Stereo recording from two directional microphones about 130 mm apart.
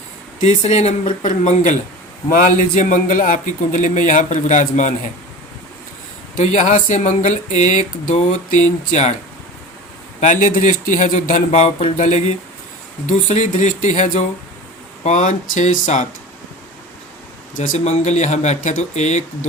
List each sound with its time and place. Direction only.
0.3 s speech: 60° left (ahead or behind)
2.3 s a man's voice: 90° left; by 5.1 s 70° left (ahead or behind)
6.3 s a man's voice: 65° left (ahead or behind)
10.2 s speech: 75° left (ahead or behind)
11.6 s a man's voice: 65° left (ahead or behind)
17.6 s speech: 75° left (ahead or behind)